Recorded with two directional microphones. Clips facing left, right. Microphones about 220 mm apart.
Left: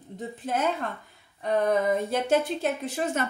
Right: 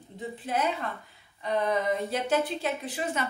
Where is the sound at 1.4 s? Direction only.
50° left (ahead or behind).